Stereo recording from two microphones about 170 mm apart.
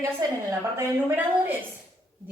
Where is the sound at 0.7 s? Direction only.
10° right (ahead or behind).